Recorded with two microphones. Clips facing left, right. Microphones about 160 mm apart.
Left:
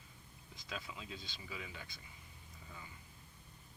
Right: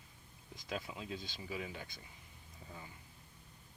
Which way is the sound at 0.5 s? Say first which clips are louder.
Right 5 dB; 45° right (ahead or behind).